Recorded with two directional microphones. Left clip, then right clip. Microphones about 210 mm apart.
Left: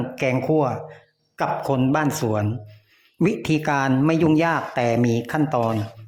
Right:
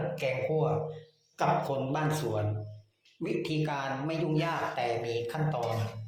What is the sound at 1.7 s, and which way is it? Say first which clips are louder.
Speech: left 10 dB; 40° left (ahead or behind).